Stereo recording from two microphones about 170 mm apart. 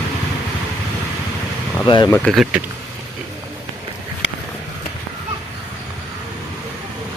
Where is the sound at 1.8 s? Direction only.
25° left (ahead or behind).